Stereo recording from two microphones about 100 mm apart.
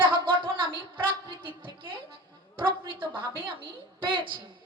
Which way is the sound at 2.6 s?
55° right (ahead or behind).